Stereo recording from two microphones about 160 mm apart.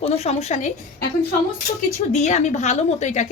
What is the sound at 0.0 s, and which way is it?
Speech, 40° left (ahead or behind).